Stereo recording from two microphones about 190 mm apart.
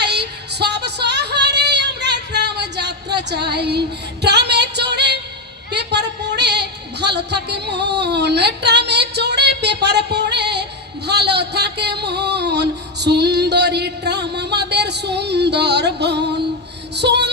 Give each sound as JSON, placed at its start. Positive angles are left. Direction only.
{"t": 0.0, "sound": "music", "side_deg": -60}
{"t": 4.2, "sound": "female singing", "side_deg": -60}
{"t": 5.7, "sound": "a sound", "side_deg": -65}